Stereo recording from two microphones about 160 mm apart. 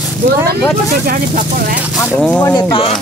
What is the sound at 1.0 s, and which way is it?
Speech, 65° right (ahead or behind).